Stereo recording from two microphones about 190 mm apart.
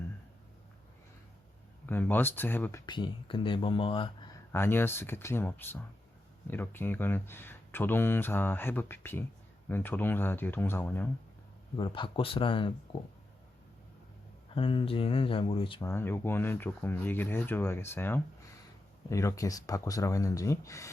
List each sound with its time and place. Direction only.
1.9 s speech: 10° left (ahead or behind)
2.8 s speech: 25° left (ahead or behind)
4.5 s speech: 10° left (ahead or behind)
11.8 s speech: 25° left (ahead or behind)
14.5 s speech: 30° left (ahead or behind)
15.8 s speech: 15° left (ahead or behind)